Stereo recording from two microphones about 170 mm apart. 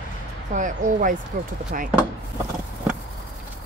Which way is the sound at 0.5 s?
50° right (ahead or behind).